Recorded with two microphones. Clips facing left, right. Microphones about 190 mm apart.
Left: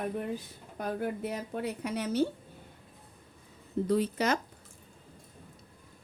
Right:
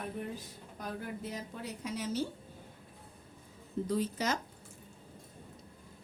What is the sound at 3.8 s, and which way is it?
Speech, 65° left (ahead or behind).